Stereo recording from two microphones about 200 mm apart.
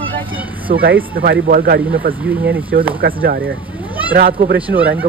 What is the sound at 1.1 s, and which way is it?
Speech, 50° right (ahead or behind).